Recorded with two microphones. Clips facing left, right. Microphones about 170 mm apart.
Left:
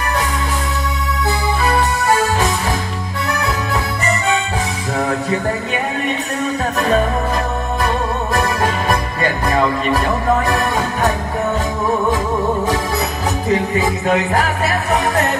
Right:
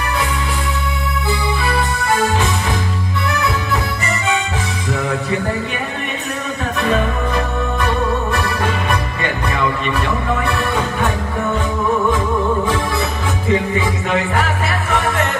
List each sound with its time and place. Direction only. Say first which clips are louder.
1.6 s music: left 3 dB; 40° left (ahead or behind)
6.8 s music: left 1 dB; 35° left (ahead or behind)
13.5 s music: even; 40° left (ahead or behind)